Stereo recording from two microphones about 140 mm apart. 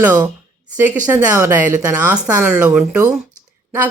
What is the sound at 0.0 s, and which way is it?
A woman's voice, 15° right (ahead or behind).